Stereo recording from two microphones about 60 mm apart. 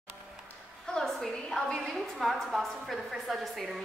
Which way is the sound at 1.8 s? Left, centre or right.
Centre.